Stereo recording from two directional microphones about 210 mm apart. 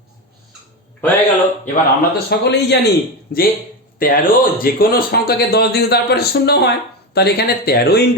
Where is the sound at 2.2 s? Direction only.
55° left (ahead or behind).